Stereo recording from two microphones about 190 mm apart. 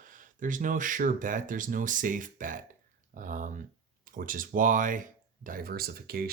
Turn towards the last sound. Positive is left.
turn(degrees=-55)  # may be behind; listen again after turning